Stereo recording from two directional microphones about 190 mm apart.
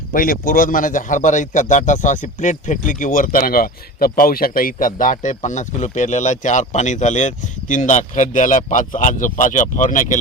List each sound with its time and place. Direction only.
0.1 s a man's voice: 45° left (ahead or behind)